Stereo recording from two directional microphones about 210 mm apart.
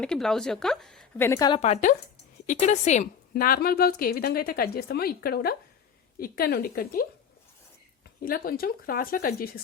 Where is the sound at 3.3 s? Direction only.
45° left (ahead or behind).